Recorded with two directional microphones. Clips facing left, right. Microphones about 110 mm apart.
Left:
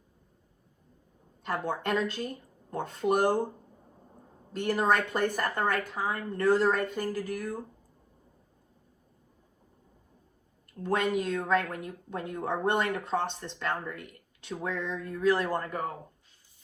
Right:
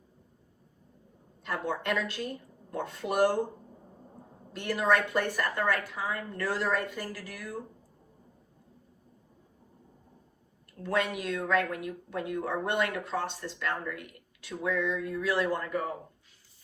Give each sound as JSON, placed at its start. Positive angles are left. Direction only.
{"t": 1.5, "sound": "a woman's voice", "side_deg": 40}
{"t": 4.6, "sound": "a woman's voice", "side_deg": 40}
{"t": 10.9, "sound": "a woman's voice", "side_deg": 40}